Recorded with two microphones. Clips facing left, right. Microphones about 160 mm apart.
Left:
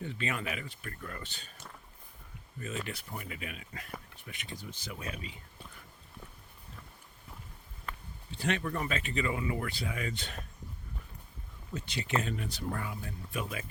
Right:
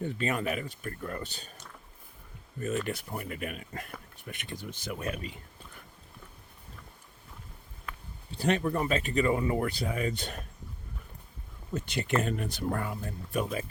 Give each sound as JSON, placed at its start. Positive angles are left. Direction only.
{"t": 0.0, "sound": "speech", "side_deg": -45}
{"t": 2.8, "sound": "speech", "side_deg": -50}
{"t": 4.3, "sound": "speech", "side_deg": -55}
{"t": 8.4, "sound": "speech", "side_deg": -40}
{"t": 11.7, "sound": "speech", "side_deg": -50}